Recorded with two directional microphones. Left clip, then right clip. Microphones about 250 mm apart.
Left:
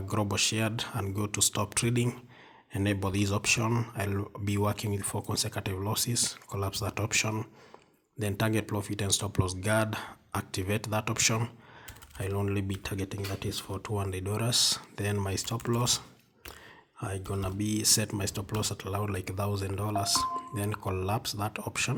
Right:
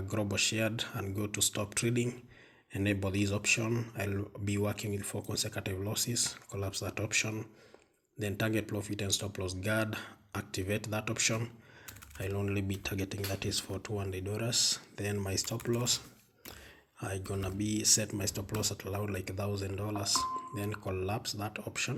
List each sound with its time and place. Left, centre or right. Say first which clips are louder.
0.0 s speech: left 3 dB; left